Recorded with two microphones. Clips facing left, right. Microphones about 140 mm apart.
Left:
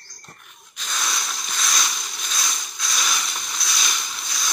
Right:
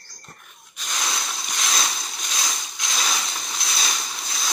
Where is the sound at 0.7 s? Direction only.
15° right (ahead or behind).